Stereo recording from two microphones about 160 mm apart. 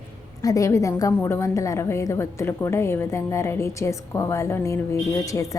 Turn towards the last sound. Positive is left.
turn(degrees=20)  # may be behind; listen again after turning